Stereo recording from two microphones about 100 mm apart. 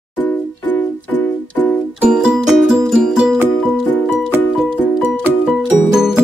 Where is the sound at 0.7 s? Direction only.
20° left (ahead or behind).